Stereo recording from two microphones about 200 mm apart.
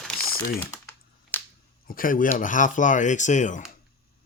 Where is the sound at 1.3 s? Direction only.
10° left (ahead or behind).